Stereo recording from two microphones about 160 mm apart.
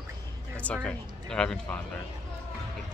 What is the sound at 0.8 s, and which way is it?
Speech, 5° left (ahead or behind).